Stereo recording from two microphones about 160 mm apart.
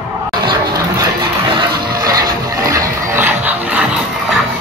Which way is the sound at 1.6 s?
25° right (ahead or behind).